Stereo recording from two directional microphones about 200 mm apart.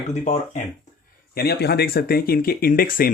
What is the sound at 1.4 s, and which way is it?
Speech, 50° left (ahead or behind).